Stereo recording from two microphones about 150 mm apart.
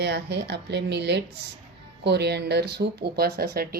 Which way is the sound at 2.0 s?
90° right.